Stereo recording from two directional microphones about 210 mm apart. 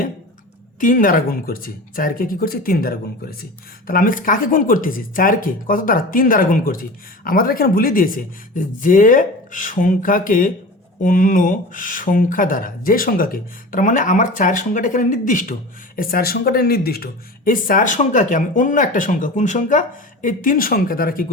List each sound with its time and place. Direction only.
0.8 s speech: 40° left (ahead or behind)